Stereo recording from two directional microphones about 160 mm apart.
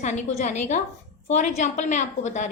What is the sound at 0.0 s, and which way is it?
A woman's voice, 45° left (ahead or behind).